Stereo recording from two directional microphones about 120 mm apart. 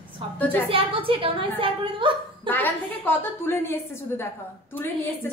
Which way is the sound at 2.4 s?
15° left (ahead or behind).